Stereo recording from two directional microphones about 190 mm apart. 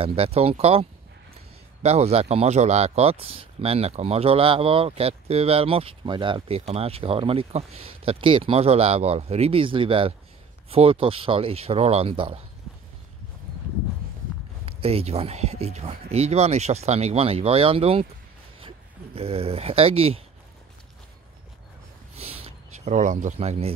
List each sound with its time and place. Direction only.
0.0 s speech: 30° right (ahead or behind)
14.8 s speech: 30° right (ahead or behind)
19.1 s speech: 30° right (ahead or behind)
22.1 s a sound: 30° right (ahead or behind)